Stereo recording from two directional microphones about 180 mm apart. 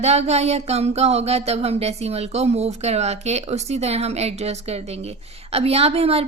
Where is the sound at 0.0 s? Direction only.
35° right (ahead or behind).